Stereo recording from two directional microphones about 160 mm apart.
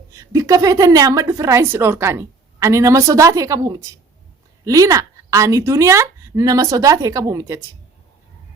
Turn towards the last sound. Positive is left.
turn(degrees=-20)  # may be behind; listen again after turning